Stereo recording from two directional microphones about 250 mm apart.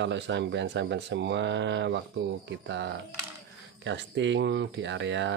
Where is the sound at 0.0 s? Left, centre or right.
Right.